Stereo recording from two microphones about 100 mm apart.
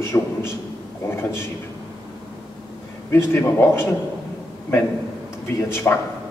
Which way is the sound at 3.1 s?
25° left (ahead or behind).